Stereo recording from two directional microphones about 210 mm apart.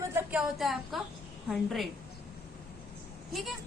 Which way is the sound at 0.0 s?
10° right (ahead or behind).